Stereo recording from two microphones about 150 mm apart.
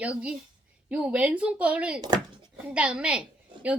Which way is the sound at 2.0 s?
30° right (ahead or behind).